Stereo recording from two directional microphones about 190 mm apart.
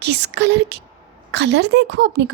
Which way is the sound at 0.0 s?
60° right (ahead or behind).